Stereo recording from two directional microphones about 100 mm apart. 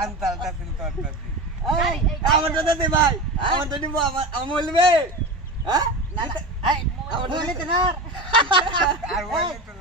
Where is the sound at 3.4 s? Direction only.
55° right (ahead or behind).